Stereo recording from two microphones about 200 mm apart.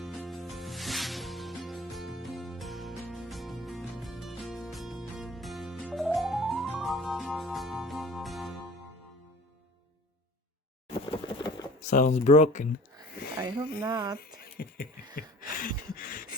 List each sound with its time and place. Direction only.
0.0 s music: centre (ahead or behind)
11.9 s speech: 40° left (ahead or behind)
13.4 s speech: 20° right (ahead or behind)
14.2 s speech: 50° left (ahead or behind)
15.1 s gasp: 45° left (ahead or behind)